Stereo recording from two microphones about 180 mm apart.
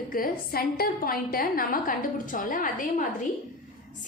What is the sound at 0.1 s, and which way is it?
A woman's voice, 55° left (ahead or behind).